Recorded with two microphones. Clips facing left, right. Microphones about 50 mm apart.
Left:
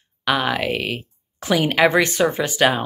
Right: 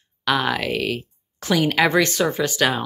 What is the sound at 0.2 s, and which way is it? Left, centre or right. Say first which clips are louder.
Speech: left 1 dB; centre.